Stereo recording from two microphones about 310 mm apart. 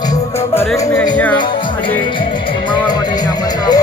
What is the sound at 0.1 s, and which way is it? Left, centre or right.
Music, centre.